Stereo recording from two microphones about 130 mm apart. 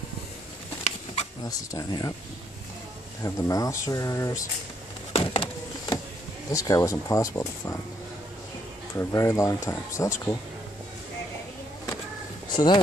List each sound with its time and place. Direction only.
1.4 s speech: 25° left (ahead or behind)
3.3 s speech: 25° left (ahead or behind)
5.1 s a sound: 45° left (ahead or behind)
6.5 s speech: 25° left (ahead or behind)
8.9 s speech: 25° left (ahead or behind)
12.5 s speech: 35° left (ahead or behind)